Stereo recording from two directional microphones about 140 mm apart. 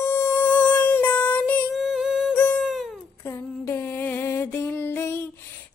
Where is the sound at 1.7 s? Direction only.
5° right (ahead or behind).